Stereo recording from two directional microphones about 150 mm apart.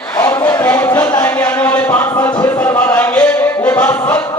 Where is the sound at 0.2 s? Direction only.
15° left (ahead or behind).